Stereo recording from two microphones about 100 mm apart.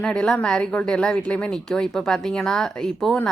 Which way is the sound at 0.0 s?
10° left (ahead or behind).